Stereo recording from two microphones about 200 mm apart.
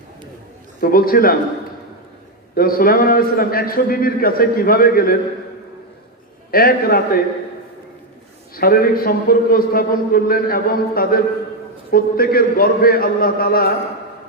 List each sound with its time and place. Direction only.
0.8 s a man's voice: 45° left (ahead or behind)
2.6 s a man's voice: 45° left (ahead or behind)
6.5 s a man's voice: 45° left (ahead or behind)
8.5 s a man's voice: 50° left (ahead or behind)